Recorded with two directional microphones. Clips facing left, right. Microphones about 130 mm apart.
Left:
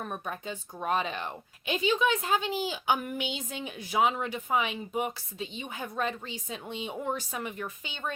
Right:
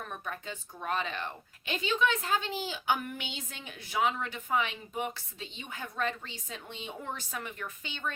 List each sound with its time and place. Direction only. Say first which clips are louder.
0.0 s speech: left 4 dB; 20° left (ahead or behind)